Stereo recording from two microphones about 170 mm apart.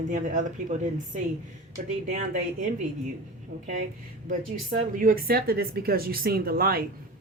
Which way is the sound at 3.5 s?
60° right (ahead or behind).